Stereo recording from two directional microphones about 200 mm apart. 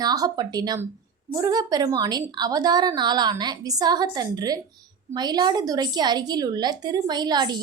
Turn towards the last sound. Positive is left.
turn(degrees=-20)  # may be behind; listen again after turning